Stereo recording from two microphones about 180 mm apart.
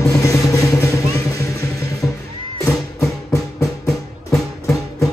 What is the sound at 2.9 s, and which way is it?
Music, 20° left (ahead or behind).